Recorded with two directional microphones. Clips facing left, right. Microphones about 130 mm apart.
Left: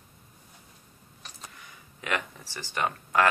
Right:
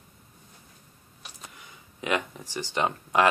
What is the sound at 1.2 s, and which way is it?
Speech, 20° right (ahead or behind).